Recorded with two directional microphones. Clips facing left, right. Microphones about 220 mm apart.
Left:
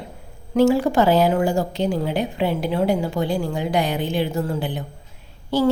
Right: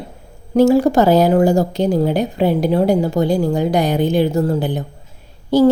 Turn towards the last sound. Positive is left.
turn(degrees=-40)  # may be behind; listen again after turning